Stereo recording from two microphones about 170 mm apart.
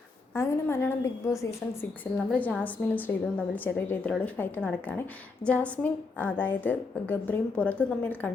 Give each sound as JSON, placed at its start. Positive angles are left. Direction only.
{"t": 0.3, "sound": "a woman's voice", "side_deg": 15}